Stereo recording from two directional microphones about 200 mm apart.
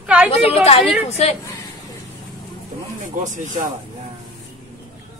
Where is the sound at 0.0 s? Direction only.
5° right (ahead or behind).